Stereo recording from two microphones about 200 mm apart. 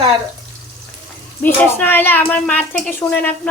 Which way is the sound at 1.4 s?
10° left (ahead or behind).